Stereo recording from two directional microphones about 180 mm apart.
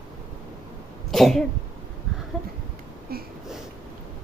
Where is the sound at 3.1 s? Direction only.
55° right (ahead or behind).